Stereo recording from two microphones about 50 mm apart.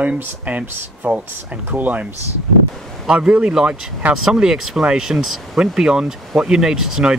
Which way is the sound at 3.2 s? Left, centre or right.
Centre.